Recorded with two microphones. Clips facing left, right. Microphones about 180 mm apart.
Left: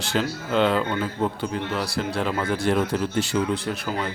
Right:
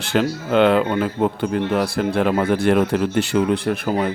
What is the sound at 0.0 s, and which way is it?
Speech, 60° right (ahead or behind).